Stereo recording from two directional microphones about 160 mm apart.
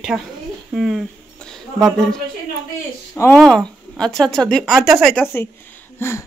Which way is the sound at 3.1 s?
15° left (ahead or behind).